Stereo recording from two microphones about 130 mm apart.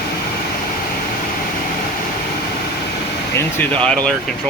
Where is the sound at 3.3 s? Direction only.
15° left (ahead or behind).